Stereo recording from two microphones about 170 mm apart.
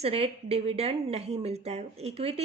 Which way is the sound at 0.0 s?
35° right (ahead or behind).